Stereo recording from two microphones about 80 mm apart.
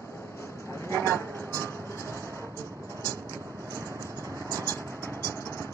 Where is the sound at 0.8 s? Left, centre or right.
Left.